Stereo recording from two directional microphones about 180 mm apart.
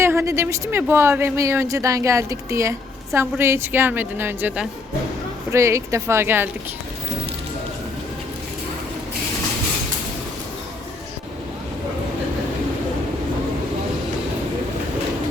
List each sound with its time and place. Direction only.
0.0 s speech: 15° right (ahead or behind)